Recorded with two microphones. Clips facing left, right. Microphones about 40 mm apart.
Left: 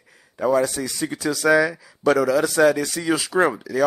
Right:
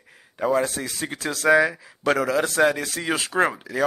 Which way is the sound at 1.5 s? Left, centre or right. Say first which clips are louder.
Right 1 dB; right.